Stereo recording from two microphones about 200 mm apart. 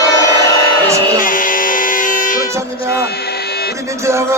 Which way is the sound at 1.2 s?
45° left (ahead or behind).